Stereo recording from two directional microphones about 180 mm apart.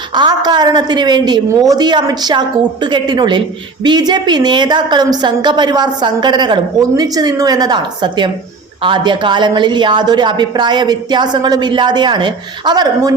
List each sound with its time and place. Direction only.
0.1 s a woman's voice: 25° right (ahead or behind)